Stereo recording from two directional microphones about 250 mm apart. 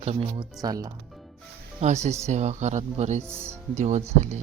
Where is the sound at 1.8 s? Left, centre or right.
Right.